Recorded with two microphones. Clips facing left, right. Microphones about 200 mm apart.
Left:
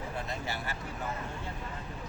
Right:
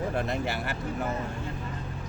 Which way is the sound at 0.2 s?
65° right (ahead or behind).